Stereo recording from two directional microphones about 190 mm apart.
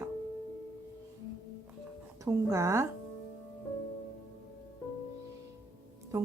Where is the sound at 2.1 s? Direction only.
15° right (ahead or behind).